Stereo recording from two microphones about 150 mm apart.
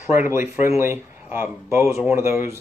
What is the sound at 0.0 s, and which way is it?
Speech, 15° right (ahead or behind).